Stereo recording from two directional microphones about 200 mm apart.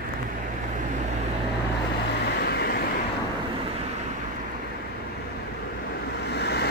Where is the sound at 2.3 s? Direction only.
55° left (ahead or behind).